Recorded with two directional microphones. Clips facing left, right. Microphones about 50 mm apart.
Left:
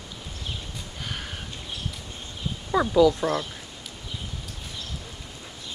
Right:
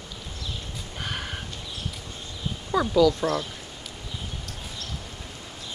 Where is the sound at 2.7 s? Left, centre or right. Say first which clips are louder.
Left 1 dB; centre.